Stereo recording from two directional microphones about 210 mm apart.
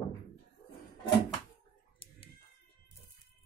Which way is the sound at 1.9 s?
25° left (ahead or behind).